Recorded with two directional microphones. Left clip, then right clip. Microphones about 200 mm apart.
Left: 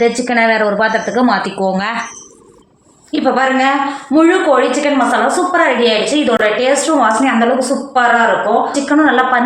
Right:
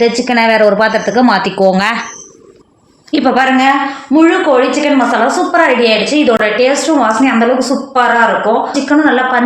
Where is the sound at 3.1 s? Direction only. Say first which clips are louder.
Right 3 dB; 50° right (ahead or behind).